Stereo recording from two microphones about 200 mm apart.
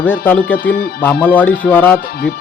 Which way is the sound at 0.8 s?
50° left (ahead or behind).